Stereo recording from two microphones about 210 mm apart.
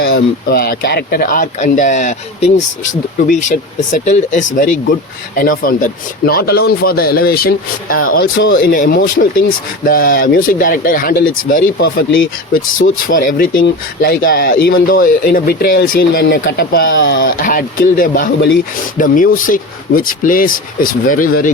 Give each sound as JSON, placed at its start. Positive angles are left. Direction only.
{"t": 0.5, "sound": "speech", "side_deg": 45}
{"t": 8.7, "sound": "speech", "side_deg": 40}